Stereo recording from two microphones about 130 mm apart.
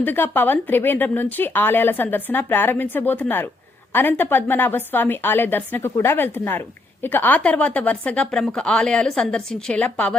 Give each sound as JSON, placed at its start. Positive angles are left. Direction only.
{"t": 0.0, "sound": "a woman's voice", "side_deg": 15}